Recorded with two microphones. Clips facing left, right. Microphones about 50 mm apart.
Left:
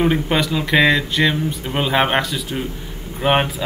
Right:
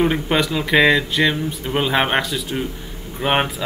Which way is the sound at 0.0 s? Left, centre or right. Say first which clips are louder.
Even; centre.